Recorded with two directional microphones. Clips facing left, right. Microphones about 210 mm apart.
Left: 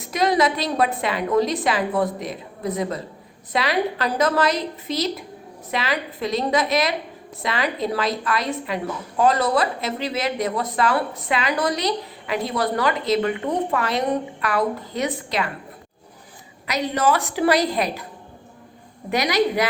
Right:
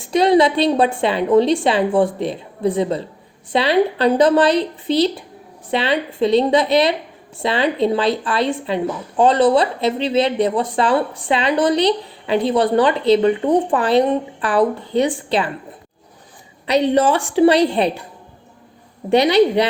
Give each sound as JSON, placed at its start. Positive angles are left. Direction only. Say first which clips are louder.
{"t": 0.0, "sound": "speech", "louder": "right 6 dB", "side_deg": -30}
{"t": 16.9, "sound": "speech", "louder": "right 5 dB", "side_deg": -30}
{"t": 19.1, "sound": "speech", "louder": "right 7 dB", "side_deg": -30}